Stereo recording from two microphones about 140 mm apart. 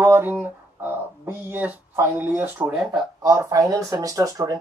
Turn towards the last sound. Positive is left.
turn(degrees=-25)  # may be behind; listen again after turning